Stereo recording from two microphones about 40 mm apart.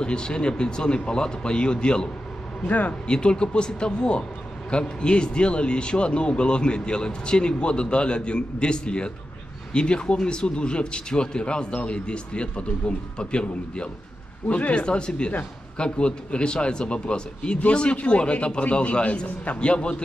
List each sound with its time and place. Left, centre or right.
0.0 s speech: left
2.6 s a man's voice: left
3.1 s speech: left